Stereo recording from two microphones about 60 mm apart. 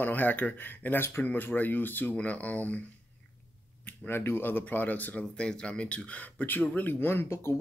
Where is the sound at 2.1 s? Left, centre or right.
Left.